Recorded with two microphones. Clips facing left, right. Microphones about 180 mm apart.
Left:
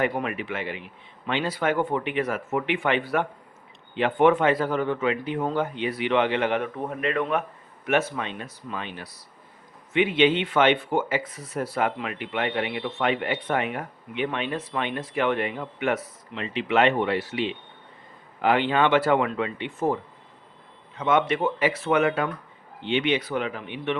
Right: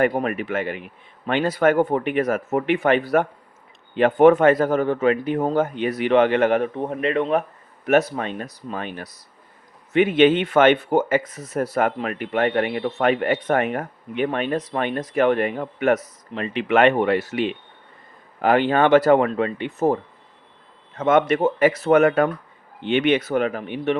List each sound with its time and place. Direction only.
0.1 s speech: 40° right (ahead or behind)
6.7 s speech: 30° right (ahead or behind)